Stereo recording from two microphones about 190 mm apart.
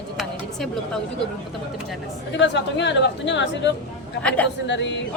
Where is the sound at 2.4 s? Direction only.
70° left (ahead or behind).